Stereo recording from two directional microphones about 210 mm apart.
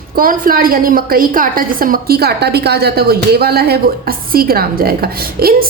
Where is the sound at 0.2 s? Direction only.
40° right (ahead or behind).